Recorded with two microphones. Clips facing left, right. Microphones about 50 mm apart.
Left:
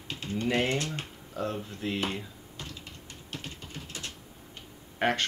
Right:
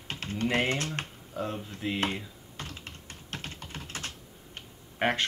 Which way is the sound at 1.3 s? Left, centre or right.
Centre.